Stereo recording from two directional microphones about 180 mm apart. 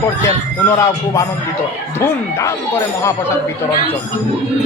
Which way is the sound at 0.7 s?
15° left (ahead or behind).